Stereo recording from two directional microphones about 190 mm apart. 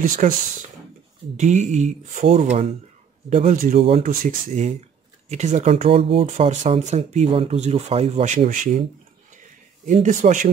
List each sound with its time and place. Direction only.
0.0 s speech: 45° right (ahead or behind)
1.3 s speech: 40° right (ahead or behind)
9.3 s a sound: 40° right (ahead or behind)